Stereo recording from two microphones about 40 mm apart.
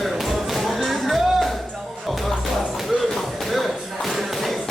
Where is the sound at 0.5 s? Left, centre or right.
Centre.